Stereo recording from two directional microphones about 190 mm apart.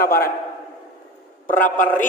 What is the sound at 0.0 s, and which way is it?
Speech, 50° left (ahead or behind).